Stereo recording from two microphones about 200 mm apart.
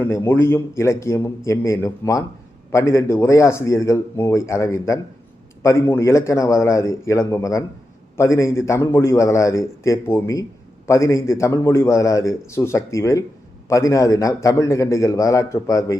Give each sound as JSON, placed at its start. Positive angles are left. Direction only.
{"t": 0.0, "sound": "a man's voice", "side_deg": 10}